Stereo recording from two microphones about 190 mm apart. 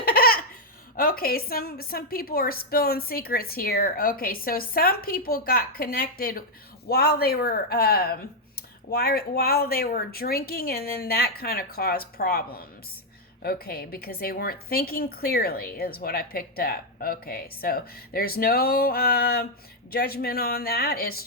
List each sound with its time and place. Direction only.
0.0 s laughter: 50° left (ahead or behind)
0.9 s a woman's voice: 50° left (ahead or behind)